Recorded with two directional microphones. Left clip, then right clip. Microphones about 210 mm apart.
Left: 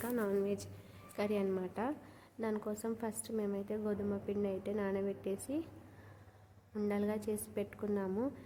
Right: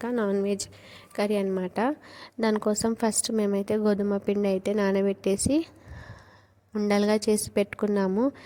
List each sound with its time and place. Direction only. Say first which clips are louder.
0.0 s a woman's voice: right 9 dB; 40° right (ahead or behind)
6.7 s a woman's voice: right 13 dB; 45° right (ahead or behind)